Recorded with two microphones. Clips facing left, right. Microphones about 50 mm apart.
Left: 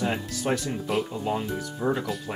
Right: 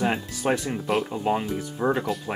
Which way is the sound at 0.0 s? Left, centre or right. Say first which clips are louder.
Right 3 dB; centre.